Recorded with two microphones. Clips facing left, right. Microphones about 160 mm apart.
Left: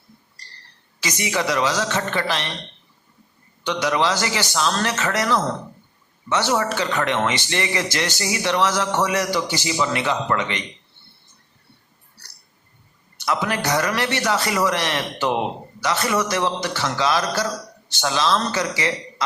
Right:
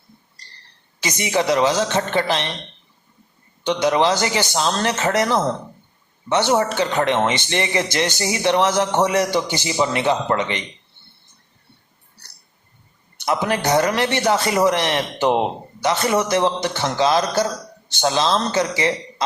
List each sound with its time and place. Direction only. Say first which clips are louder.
1.0 s a man's voice: right 4 dB; 20° right (ahead or behind)
3.6 s a man's voice: right 4 dB; 25° right (ahead or behind)
13.2 s a man's voice: right 3 dB; 20° right (ahead or behind)